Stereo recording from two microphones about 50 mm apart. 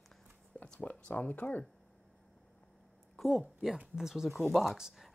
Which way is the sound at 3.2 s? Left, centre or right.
Centre.